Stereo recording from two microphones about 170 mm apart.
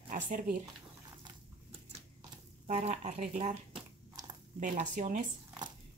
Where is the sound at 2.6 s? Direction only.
45° right (ahead or behind).